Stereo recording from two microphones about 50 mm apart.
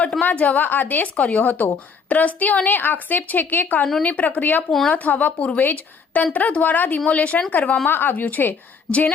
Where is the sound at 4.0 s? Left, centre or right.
Left.